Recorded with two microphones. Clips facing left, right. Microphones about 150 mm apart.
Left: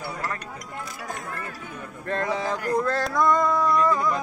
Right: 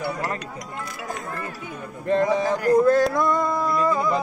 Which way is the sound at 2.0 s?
15° right (ahead or behind).